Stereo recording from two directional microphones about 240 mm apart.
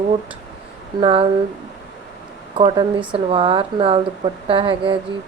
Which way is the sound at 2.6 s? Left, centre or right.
Right.